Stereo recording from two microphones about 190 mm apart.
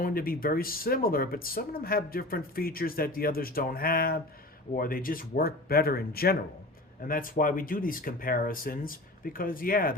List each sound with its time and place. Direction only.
0.0 s speech: 50° left (ahead or behind)